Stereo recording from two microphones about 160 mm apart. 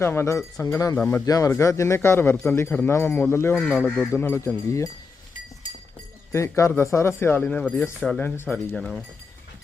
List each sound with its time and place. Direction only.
0.0 s a man's voice: 15° left (ahead or behind)
6.3 s a man's voice: 15° left (ahead or behind)